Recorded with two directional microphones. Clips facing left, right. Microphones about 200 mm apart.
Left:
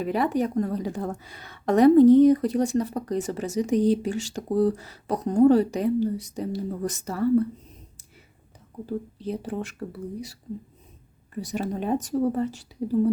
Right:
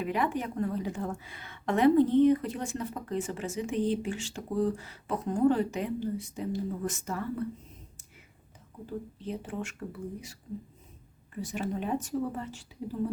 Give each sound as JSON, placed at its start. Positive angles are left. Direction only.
{"t": 0.0, "sound": "a woman's voice", "side_deg": 40}
{"t": 8.9, "sound": "a woman's voice", "side_deg": 35}
{"t": 11.3, "sound": "a woman's voice", "side_deg": 40}